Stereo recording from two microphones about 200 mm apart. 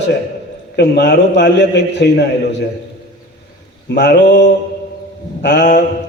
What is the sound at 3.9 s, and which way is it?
Speech, 60° left (ahead or behind).